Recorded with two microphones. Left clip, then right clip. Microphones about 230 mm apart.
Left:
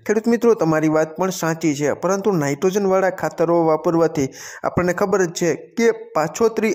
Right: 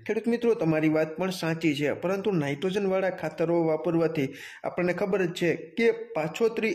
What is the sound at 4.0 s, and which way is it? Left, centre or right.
Speech, centre.